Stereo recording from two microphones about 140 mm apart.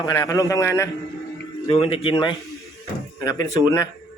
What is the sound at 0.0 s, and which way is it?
Speech, 25° left (ahead or behind).